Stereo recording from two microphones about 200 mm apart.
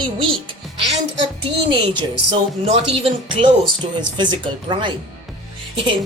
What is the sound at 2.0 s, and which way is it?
Speech, 25° right (ahead or behind).